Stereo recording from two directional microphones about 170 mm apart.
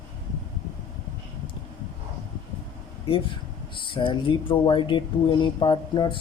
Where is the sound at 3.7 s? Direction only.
30° left (ahead or behind).